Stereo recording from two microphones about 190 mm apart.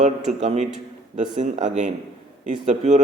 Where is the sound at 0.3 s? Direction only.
35° right (ahead or behind).